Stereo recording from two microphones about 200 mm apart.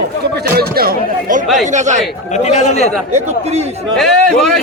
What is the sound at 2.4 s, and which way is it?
Speech, 35° left (ahead or behind).